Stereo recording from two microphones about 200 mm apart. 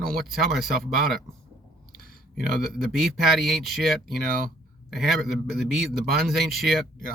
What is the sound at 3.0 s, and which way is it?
Speech, centre (ahead or behind).